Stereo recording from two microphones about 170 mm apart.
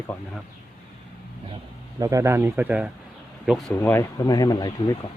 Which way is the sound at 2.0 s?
20° right (ahead or behind).